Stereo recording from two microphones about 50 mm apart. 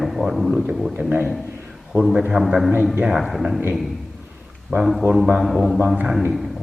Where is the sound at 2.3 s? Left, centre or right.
Centre.